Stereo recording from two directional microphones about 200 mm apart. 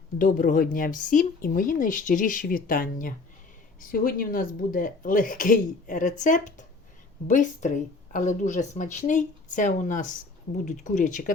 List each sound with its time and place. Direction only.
0.2 s speech: 45° left (ahead or behind)